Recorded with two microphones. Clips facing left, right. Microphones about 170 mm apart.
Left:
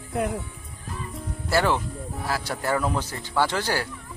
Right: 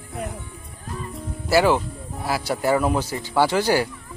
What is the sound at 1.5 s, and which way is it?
Speech, 5° right (ahead or behind).